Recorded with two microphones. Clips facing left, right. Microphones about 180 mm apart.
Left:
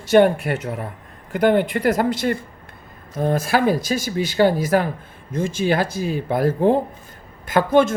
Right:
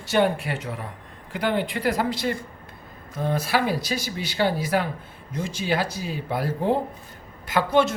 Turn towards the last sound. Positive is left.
turn(degrees=50)  # may be behind; listen again after turning